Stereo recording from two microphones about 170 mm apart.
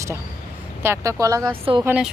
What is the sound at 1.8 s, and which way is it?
Speech, 5° right (ahead or behind).